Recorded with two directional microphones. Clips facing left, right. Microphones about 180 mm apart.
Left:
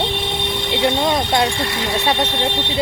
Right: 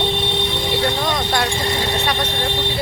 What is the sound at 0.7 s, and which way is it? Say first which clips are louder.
Speech: left 5 dB; 25° left (ahead or behind).